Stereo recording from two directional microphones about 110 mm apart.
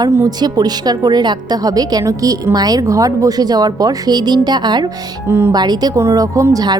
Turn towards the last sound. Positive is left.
turn(degrees=-35)  # may be behind; listen again after turning